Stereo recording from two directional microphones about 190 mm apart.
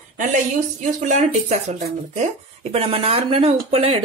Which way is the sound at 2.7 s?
30° right (ahead or behind).